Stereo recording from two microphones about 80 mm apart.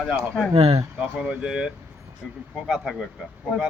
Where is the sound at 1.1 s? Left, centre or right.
Centre.